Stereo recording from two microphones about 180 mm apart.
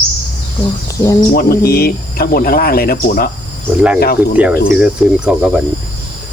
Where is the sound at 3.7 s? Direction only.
5° right (ahead or behind).